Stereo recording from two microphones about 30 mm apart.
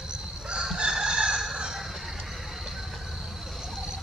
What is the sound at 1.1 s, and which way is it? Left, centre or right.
Fowl, centre.